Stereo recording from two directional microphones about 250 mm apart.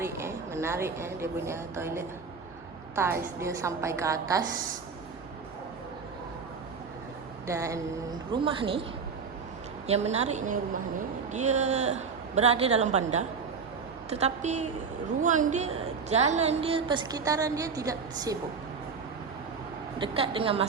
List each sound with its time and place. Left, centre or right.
0.0 s a woman's voice: centre
7.4 s a woman's voice: centre
9.8 s a woman's voice: right
20.0 s a woman's voice: right